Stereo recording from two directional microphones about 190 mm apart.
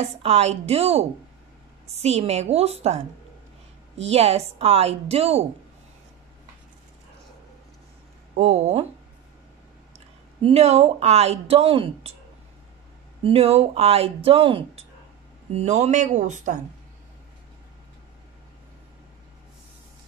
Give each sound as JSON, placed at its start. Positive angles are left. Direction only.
{"t": 0.0, "sound": "speech", "side_deg": -35}
{"t": 4.0, "sound": "speech", "side_deg": -35}
{"t": 8.4, "sound": "speech", "side_deg": -35}
{"t": 9.9, "sound": "speech", "side_deg": -35}
{"t": 13.2, "sound": "speech", "side_deg": -30}